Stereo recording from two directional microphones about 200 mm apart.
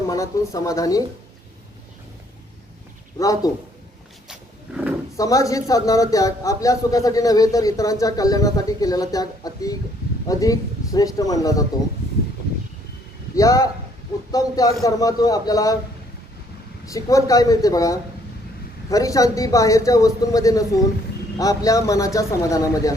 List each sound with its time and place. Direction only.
0.1 s a man's voice: 15° left (ahead or behind)
3.2 s a man's voice: 15° left (ahead or behind)
5.1 s a man's voice: 15° left (ahead or behind)
13.3 s a man's voice: 15° left (ahead or behind)
16.8 s a man's voice: 15° left (ahead or behind)